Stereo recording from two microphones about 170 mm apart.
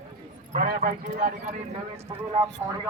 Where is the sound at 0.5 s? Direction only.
55° right (ahead or behind).